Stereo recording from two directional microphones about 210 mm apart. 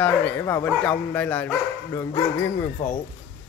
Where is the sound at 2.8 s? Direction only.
35° left (ahead or behind).